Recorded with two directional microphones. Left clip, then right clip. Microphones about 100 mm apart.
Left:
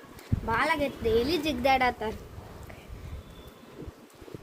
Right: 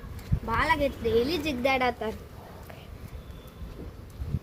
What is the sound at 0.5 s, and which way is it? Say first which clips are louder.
A woman's voice: right 2 dB; 35° left (ahead or behind).